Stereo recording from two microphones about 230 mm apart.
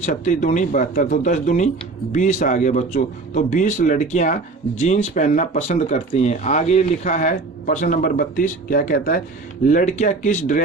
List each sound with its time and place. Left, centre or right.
0.0 s a man's voice: left